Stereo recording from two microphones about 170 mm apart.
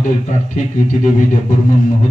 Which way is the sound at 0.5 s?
45° left (ahead or behind).